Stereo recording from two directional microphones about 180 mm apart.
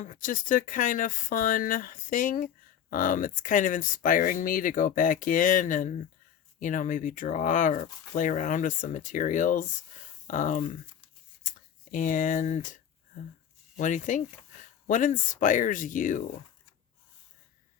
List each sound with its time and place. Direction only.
0.0 s speech: 45° left (ahead or behind)
11.9 s speech: 45° left (ahead or behind)